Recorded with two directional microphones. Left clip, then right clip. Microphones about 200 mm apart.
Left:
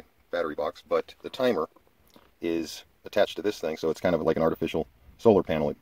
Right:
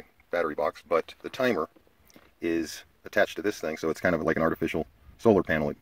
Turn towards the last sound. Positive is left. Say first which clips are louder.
# left 1 dB
turn(degrees=10)  # may be behind; listen again after turning